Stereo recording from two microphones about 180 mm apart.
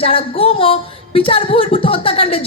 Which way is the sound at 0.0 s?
30° left (ahead or behind).